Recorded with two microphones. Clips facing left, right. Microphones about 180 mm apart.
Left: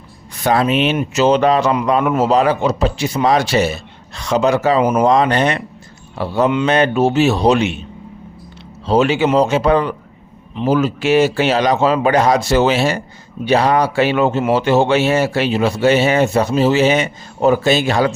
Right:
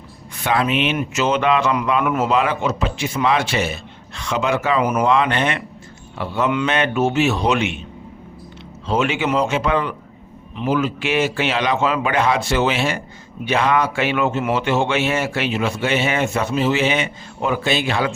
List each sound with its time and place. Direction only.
0.3 s speech: 40° left (ahead or behind)
8.9 s speech: 35° left (ahead or behind)